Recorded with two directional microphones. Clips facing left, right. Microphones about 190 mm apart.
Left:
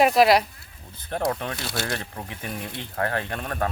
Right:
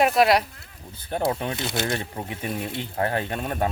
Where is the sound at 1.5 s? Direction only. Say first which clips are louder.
Right 3 dB; 20° right (ahead or behind).